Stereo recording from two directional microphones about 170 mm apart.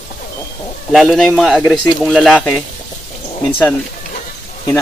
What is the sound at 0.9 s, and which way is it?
Speech, centre (ahead or behind).